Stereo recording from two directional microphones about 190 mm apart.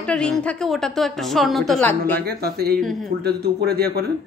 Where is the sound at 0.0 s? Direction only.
5° left (ahead or behind).